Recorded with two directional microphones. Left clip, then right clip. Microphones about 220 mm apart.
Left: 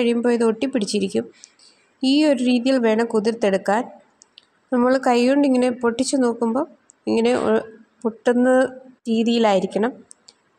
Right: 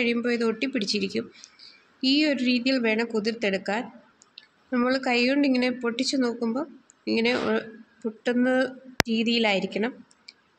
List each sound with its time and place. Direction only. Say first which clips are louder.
0.0 s a woman's voice: left 6 dB; 25° left (ahead or behind)